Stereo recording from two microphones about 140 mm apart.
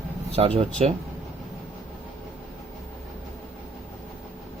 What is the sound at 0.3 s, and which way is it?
Speech, 50° right (ahead or behind).